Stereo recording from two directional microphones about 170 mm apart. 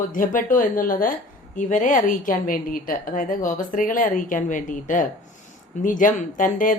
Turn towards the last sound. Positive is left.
turn(degrees=50)  # may be behind; listen again after turning